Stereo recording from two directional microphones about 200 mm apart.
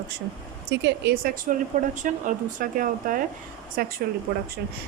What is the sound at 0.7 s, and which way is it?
Speech, 60° right (ahead or behind).